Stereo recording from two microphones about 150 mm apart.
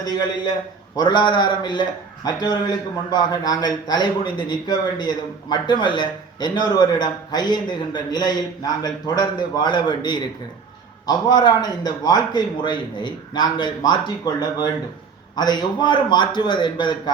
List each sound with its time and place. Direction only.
0.0 s a man's voice: 25° left (ahead or behind)